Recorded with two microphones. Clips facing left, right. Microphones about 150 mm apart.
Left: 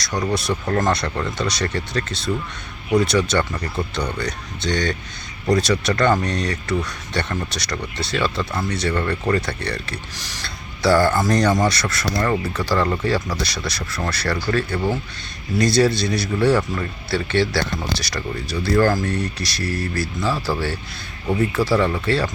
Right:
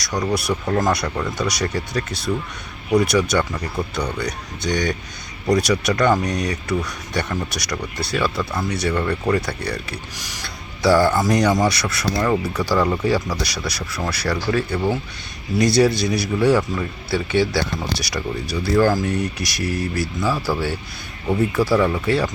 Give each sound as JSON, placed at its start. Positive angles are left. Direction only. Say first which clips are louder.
{"t": 0.3, "sound": "speech", "louder": "right 1 dB", "side_deg": -10}
{"t": 15.5, "sound": "speech", "louder": "right 1 dB", "side_deg": -15}
{"t": 21.8, "sound": "speech", "louder": "right 1 dB", "side_deg": -5}